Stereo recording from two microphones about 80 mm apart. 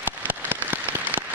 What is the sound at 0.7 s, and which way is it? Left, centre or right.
Rain on surface, right.